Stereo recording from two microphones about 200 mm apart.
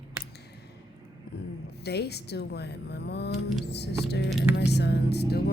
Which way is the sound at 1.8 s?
55° left (ahead or behind).